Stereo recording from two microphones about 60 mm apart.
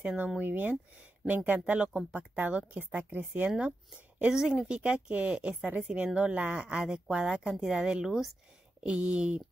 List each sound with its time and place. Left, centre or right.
0.0 s a woman's voice: right
4.3 s a woman's voice: centre
8.8 s a woman's voice: centre